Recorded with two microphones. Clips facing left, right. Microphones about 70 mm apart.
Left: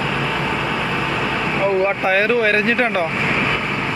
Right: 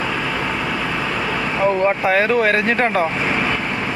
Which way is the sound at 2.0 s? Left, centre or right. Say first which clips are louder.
Even; right.